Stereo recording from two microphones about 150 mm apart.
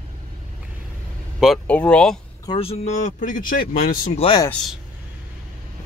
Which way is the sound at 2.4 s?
35° left (ahead or behind).